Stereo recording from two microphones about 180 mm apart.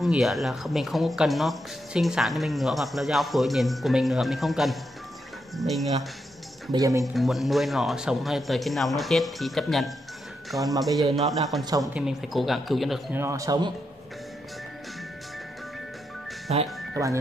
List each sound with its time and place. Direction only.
0.0 s speech: centre (ahead or behind)
6.7 s speech: 20° right (ahead or behind)
7.2 s speech: centre (ahead or behind)
10.5 s speech: 15° right (ahead or behind)
11.1 s speech: centre (ahead or behind)
11.6 s speech: 20° right (ahead or behind)
11.9 s speech: 5° right (ahead or behind)
13.1 s speech: 15° right (ahead or behind)
16.5 s speech: 35° right (ahead or behind)
16.9 s speech: 15° right (ahead or behind)